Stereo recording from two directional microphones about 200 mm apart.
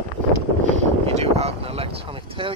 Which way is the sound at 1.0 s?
30° right (ahead or behind).